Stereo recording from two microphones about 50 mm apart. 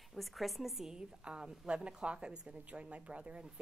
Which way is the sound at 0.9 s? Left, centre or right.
Centre.